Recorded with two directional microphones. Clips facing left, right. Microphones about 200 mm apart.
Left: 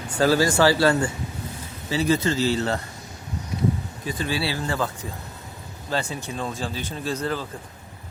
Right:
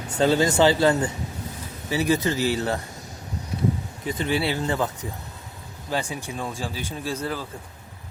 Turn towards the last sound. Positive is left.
turn(degrees=-10)  # may be behind; listen again after turning